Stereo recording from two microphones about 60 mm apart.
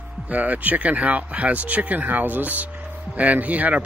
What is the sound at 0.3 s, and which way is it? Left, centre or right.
Speech, right.